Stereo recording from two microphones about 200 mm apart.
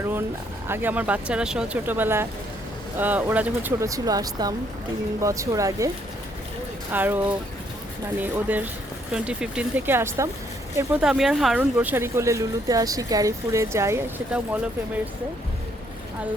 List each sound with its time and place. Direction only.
0.0 s a sound: 10° right (ahead or behind)
0.7 s speech: 10° right (ahead or behind)
6.9 s speech: 10° right (ahead or behind)